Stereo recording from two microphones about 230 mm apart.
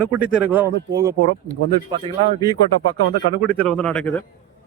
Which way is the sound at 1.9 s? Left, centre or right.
Centre.